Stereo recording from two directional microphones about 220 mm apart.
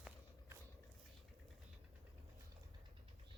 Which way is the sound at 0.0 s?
10° right (ahead or behind).